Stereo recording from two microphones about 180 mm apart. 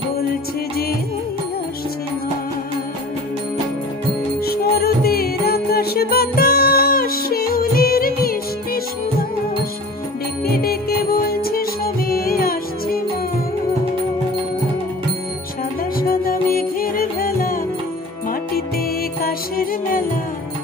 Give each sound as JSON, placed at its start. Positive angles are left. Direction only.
{"t": 4.5, "sound": "music", "side_deg": 60}
{"t": 10.4, "sound": "music", "side_deg": 60}
{"t": 16.0, "sound": "music", "side_deg": 55}
{"t": 19.2, "sound": "music", "side_deg": 55}